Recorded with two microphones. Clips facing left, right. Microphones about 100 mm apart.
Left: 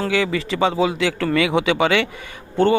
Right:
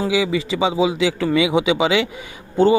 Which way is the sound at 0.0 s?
5° right (ahead or behind).